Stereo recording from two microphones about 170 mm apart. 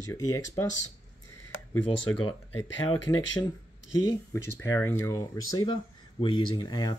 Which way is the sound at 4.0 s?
20° left (ahead or behind).